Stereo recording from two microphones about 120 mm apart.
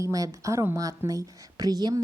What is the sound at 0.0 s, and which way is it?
Speech, 25° right (ahead or behind).